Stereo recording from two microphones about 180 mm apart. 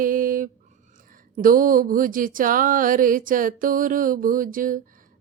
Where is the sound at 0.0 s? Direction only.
50° right (ahead or behind).